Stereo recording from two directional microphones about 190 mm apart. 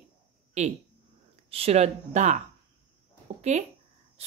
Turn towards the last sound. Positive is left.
turn(degrees=-35)  # may be behind; listen again after turning